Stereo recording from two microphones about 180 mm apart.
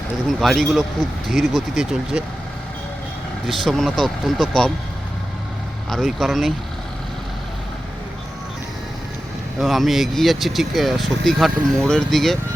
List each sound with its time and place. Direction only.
0.3 s speech: centre (ahead or behind)
3.4 s speech: centre (ahead or behind)
5.9 s speech: centre (ahead or behind)
9.6 s speech: centre (ahead or behind)